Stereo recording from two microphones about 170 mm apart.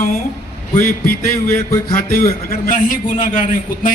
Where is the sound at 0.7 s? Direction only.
55° left (ahead or behind).